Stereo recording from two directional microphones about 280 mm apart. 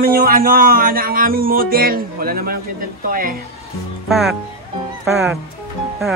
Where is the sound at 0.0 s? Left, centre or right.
Right.